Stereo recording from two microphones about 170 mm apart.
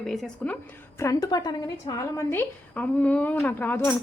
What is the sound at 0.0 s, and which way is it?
A woman's voice, centre (ahead or behind).